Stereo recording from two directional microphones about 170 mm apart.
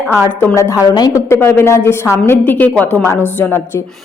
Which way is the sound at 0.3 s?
15° left (ahead or behind).